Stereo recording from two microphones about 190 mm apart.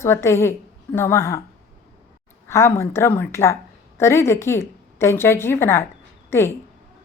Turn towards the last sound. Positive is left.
turn(degrees=15)  # may be behind; listen again after turning